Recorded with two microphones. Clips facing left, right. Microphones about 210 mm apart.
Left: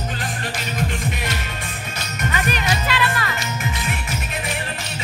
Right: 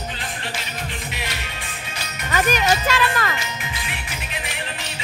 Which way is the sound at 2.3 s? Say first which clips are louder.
Right 5 dB; 45° right (ahead or behind).